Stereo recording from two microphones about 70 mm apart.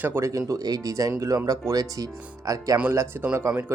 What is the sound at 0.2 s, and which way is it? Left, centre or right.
Speech, right.